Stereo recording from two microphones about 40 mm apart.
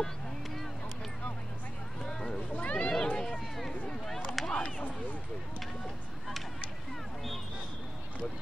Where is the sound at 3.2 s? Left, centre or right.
Centre.